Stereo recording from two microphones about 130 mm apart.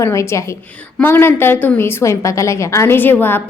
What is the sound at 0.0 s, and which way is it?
A woman's voice, 20° left (ahead or behind).